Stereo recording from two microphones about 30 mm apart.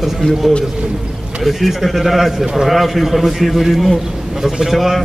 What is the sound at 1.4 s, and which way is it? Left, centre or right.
A man's voice, centre.